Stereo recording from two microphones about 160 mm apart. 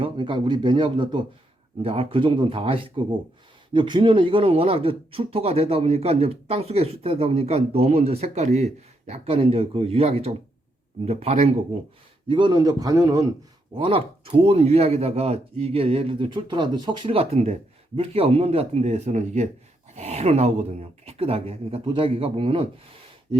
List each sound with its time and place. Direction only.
0.0 s speech: 30° right (ahead or behind)
12.3 s a man's voice: 30° right (ahead or behind)
13.7 s speech: 35° right (ahead or behind)